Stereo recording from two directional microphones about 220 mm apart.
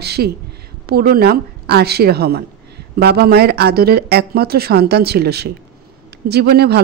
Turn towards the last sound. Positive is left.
turn(degrees=-45)  # may be behind; listen again after turning